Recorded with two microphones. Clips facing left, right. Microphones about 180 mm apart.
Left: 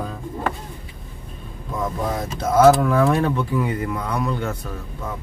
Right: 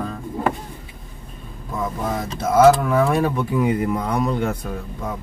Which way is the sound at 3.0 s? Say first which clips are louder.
Even; 10° right (ahead or behind).